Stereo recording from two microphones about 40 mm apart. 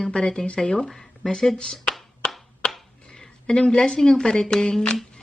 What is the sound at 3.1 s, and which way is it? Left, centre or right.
A woman's voice, centre.